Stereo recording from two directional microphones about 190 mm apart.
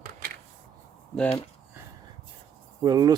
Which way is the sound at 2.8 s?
20° right (ahead or behind).